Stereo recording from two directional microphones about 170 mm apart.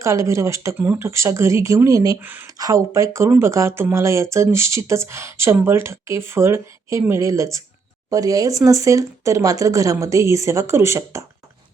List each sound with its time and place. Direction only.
0.0 s speech: 15° right (ahead or behind)